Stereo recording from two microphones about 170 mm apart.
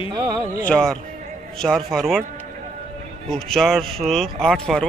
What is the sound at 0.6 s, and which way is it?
Speech, 5° left (ahead or behind).